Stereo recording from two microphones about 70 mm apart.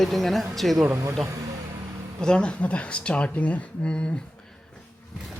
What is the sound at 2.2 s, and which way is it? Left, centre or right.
Speech, centre.